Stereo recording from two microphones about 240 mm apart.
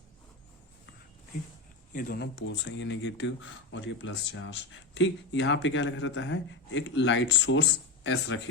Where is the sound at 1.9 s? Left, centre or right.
Left.